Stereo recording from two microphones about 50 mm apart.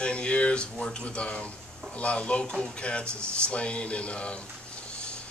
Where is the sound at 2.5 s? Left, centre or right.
Centre.